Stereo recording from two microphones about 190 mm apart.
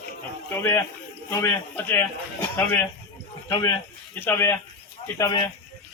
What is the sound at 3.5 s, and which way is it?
Speech, 15° left (ahead or behind).